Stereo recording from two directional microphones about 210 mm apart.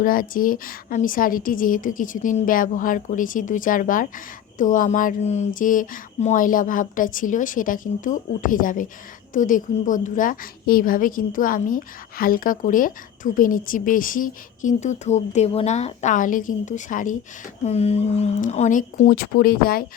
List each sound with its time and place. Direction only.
0.0 s a woman's voice: 40° left (ahead or behind)